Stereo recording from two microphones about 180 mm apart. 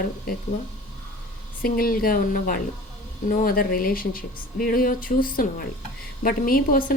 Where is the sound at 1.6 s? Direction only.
50° left (ahead or behind).